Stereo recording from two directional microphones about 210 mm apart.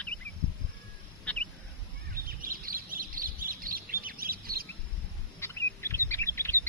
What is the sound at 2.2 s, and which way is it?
Bird, 45° right (ahead or behind).